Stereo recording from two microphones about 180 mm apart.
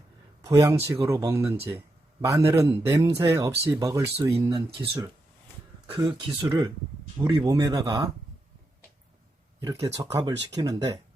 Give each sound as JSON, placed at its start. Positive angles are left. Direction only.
{"t": 0.4, "sound": "speech", "side_deg": -15}
{"t": 9.8, "sound": "speech", "side_deg": -15}